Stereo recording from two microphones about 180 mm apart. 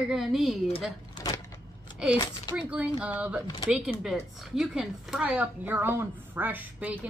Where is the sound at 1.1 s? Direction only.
20° left (ahead or behind).